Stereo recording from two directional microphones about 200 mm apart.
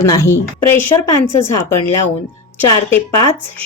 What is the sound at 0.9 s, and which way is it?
Speech, 25° left (ahead or behind).